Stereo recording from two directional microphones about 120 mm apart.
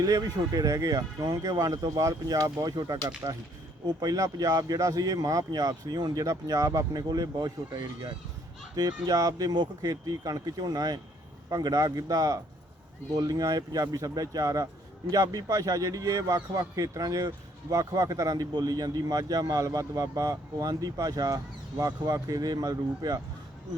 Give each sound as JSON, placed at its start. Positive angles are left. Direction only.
{"t": 0.0, "sound": "a man's voice", "side_deg": -30}